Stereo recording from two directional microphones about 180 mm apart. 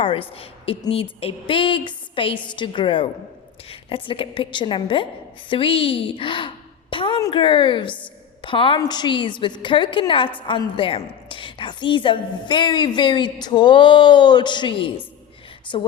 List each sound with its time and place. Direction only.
0.0 s a woman's voice: 30° left (ahead or behind)